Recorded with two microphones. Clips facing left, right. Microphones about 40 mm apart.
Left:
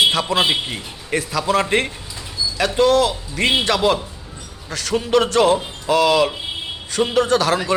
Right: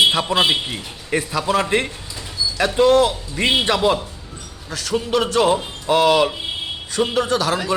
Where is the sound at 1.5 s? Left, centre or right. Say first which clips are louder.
Left 1 dB; centre.